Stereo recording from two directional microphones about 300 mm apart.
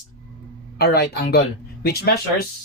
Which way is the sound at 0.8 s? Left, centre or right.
Left.